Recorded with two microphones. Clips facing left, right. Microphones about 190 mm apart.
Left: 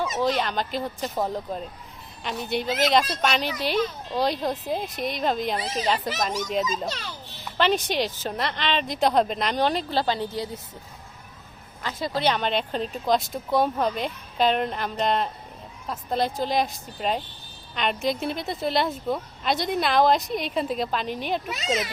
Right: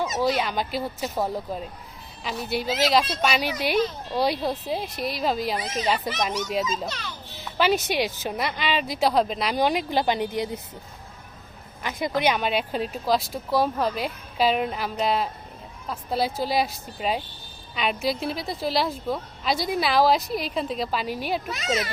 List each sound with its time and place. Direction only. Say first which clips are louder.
0.2 s a woman's voice: even; 10° right (ahead or behind)
5.5 s a child's voice: even; 30° left (ahead or behind)
7.6 s a woman's voice: right 1 dB; 10° right (ahead or behind)
11.8 s a woman's voice: right 2 dB; 15° right (ahead or behind)